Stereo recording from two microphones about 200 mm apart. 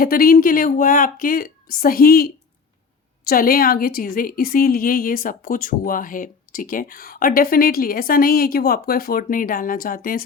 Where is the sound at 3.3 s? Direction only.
45° left (ahead or behind).